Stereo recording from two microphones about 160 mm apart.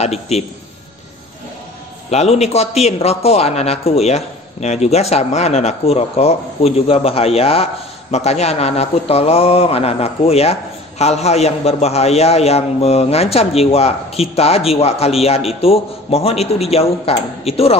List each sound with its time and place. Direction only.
0.0 s a man's voice: 40° left (ahead or behind)
2.0 s a man's voice: 40° left (ahead or behind)